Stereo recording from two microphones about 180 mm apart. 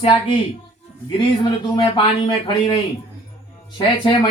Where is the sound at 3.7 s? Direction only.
25° left (ahead or behind).